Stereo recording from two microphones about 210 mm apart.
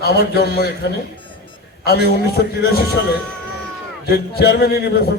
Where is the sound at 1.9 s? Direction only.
50° left (ahead or behind).